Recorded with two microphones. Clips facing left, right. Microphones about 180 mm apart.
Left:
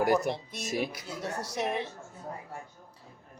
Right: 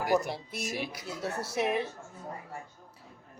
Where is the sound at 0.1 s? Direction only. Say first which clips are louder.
Left 1 dB; 5° right (ahead or behind).